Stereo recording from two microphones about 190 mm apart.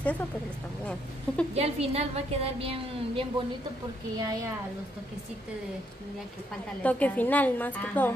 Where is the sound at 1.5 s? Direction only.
35° right (ahead or behind).